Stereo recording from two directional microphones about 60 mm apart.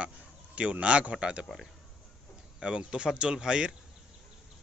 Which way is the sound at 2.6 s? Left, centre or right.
Centre.